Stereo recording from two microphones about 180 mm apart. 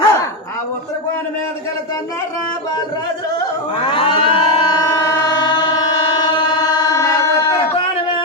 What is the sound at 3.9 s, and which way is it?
Train, 30° left (ahead or behind).